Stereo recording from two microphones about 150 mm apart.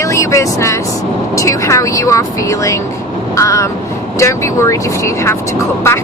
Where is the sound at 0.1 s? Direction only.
20° left (ahead or behind).